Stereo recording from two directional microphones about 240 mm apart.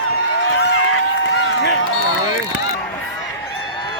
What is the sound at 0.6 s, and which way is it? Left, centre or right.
Run, left.